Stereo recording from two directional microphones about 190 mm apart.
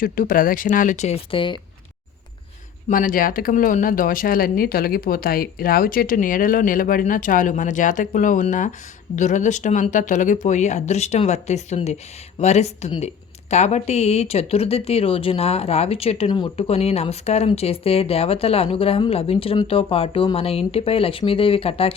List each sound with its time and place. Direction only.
0.0 s speech: 45° left (ahead or behind); by 1.6 s 25° left (ahead or behind)
2.9 s speech: 45° left (ahead or behind); by 21.9 s 30° left (ahead or behind)